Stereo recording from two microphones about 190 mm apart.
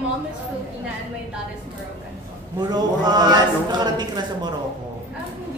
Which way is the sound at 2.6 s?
20° right (ahead or behind).